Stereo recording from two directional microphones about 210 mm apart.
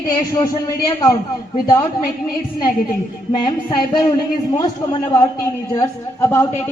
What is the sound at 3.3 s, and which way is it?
A man's voice, 20° left (ahead or behind).